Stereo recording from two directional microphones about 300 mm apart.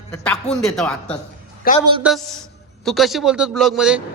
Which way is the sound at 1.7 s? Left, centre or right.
Left.